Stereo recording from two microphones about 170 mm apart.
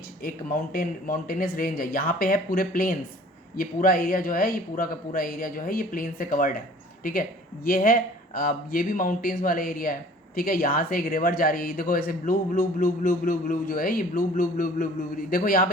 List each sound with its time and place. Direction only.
0.2 s speech: 60° left (ahead or behind)